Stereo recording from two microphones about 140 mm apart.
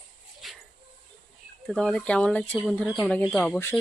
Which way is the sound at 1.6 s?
5° left (ahead or behind).